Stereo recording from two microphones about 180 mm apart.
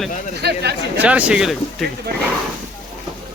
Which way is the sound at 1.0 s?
5° right (ahead or behind).